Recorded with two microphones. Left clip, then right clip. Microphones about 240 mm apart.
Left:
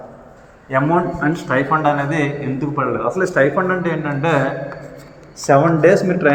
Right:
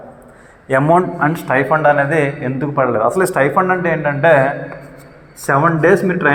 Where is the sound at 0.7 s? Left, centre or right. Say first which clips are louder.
Right 4 dB; right.